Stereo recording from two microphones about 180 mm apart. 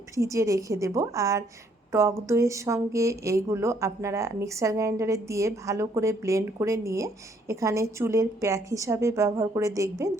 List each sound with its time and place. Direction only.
0.2 s speech: 15° right (ahead or behind)